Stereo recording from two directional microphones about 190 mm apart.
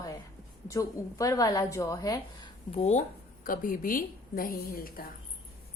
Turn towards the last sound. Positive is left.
turn(degrees=50)  # may be behind; listen again after turning